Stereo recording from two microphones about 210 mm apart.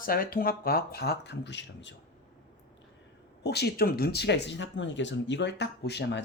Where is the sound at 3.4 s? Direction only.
50° left (ahead or behind).